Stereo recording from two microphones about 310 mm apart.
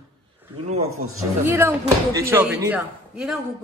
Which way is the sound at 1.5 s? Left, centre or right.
Centre.